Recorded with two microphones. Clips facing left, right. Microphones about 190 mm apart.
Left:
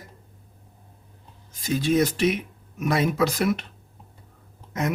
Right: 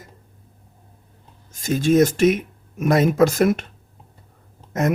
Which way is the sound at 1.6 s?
45° right (ahead or behind).